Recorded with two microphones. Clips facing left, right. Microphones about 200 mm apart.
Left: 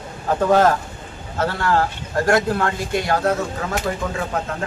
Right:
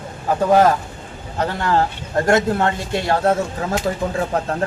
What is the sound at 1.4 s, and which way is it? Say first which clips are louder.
A man's voice: right 1 dB; 20° right (ahead or behind).